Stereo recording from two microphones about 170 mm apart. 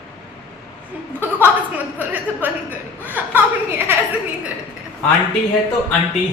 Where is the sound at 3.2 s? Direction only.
10° right (ahead or behind).